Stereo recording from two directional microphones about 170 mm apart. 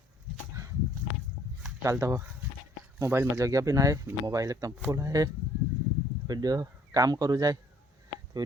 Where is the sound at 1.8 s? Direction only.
15° right (ahead or behind).